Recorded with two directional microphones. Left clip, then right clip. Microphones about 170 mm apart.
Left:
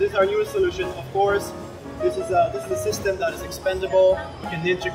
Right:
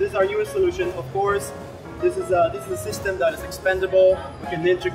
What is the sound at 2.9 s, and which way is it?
Speech, 25° right (ahead or behind).